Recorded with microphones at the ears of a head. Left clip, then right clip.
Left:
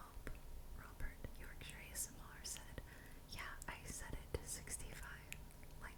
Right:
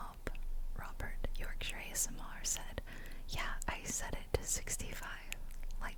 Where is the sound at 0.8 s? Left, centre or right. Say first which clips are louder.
Right 10 dB; right.